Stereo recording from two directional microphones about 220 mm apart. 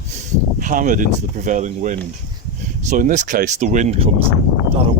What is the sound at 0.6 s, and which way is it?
Speech, 35° right (ahead or behind).